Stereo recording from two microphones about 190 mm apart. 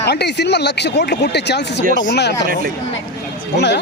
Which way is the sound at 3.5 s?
65° left (ahead or behind).